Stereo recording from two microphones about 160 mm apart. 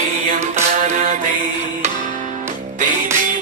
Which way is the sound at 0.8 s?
50° right (ahead or behind).